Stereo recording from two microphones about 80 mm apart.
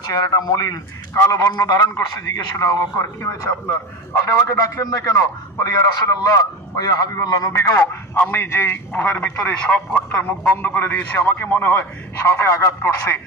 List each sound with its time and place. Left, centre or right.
0.1 s a man's voice: left
12.3 s speech: left